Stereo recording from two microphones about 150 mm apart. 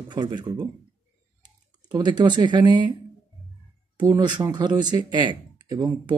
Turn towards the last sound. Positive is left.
turn(degrees=-30)  # may be behind; listen again after turning